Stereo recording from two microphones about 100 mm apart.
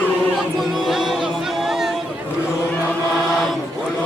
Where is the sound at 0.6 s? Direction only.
5° right (ahead or behind).